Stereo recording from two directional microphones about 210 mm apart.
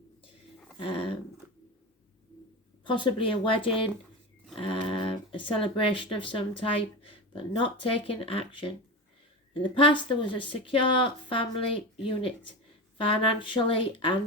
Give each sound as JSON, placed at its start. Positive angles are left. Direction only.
{"t": 0.8, "sound": "dog", "side_deg": 25}
{"t": 2.8, "sound": "speech", "side_deg": 25}
{"t": 13.0, "sound": "speech", "side_deg": 25}